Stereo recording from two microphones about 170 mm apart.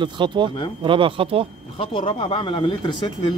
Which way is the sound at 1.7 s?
30° left (ahead or behind).